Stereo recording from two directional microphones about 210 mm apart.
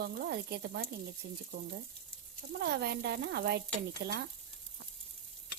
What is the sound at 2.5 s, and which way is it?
Speech, 50° right (ahead or behind).